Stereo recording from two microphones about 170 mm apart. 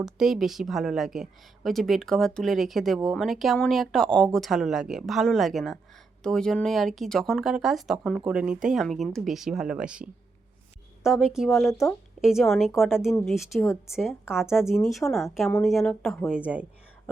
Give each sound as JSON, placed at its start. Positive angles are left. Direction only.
{"t": 0.0, "sound": "a woman's voice", "side_deg": 0}
{"t": 13.6, "sound": "speech", "side_deg": 15}
{"t": 13.9, "sound": "a woman's voice", "side_deg": -5}